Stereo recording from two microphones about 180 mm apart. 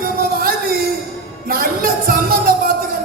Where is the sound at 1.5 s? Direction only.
55° right (ahead or behind).